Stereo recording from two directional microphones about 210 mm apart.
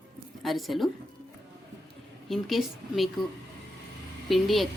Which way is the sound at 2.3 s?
Centre (ahead or behind).